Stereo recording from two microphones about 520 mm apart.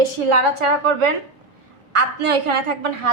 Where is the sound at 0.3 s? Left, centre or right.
Right.